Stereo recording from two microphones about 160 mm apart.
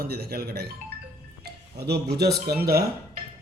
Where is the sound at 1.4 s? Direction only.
90° right.